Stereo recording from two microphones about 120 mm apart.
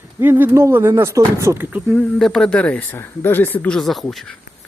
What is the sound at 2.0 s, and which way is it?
Speech, centre (ahead or behind).